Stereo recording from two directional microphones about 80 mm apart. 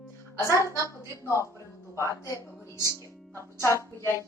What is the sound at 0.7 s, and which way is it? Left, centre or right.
Speech, right.